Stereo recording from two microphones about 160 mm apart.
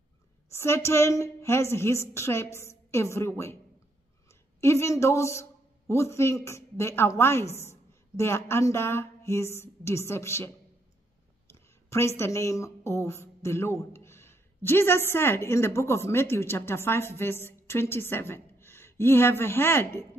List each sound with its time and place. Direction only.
0.5 s a woman's voice: 15° left (ahead or behind)
12.2 s a woman's voice: 20° left (ahead or behind)